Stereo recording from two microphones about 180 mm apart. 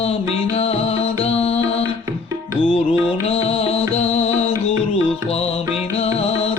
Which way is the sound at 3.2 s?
35° left (ahead or behind).